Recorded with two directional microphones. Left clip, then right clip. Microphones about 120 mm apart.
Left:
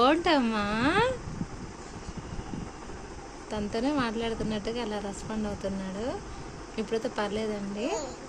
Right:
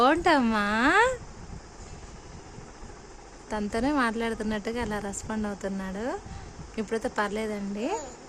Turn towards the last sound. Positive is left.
turn(degrees=-55)  # may be behind; listen again after turning